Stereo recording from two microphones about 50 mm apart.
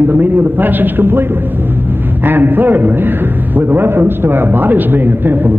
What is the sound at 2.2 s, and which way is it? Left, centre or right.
A man's voice, right.